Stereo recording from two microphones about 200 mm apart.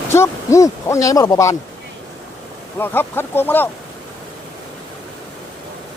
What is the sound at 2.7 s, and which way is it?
Speech, 10° left (ahead or behind).